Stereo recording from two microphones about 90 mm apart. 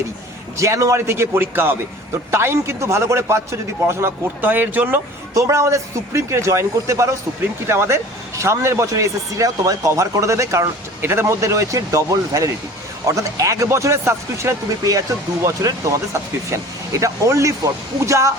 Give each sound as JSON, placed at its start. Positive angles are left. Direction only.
{"t": 0.5, "sound": "a man's voice", "side_deg": -35}
{"t": 5.3, "sound": "speech", "side_deg": -35}
{"t": 17.0, "sound": "speech", "side_deg": -35}